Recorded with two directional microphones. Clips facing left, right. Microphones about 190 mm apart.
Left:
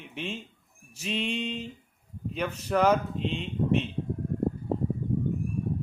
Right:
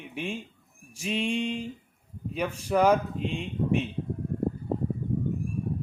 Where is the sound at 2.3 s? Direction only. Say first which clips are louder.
Right 1 dB; 10° right (ahead or behind).